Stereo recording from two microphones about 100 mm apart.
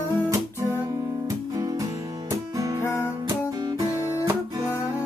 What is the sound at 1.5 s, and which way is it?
Music, 35° right (ahead or behind).